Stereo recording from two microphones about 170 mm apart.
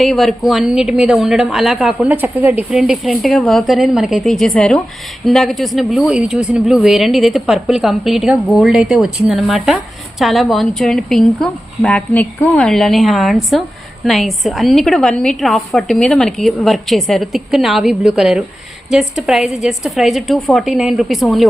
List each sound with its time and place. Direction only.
0.0 s speech: centre (ahead or behind)